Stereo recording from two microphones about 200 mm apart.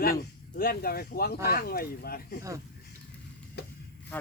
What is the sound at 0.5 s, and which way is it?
Speech, 50° left (ahead or behind).